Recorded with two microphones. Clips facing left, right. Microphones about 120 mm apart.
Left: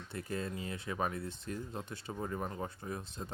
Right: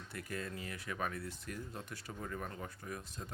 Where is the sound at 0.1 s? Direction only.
25° left (ahead or behind).